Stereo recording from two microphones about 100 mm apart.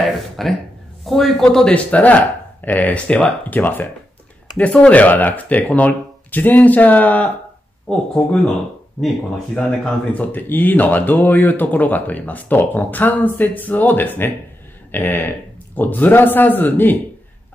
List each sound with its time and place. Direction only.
0.1 s speech: 5° left (ahead or behind)
9.5 s a man's voice: 10° left (ahead or behind)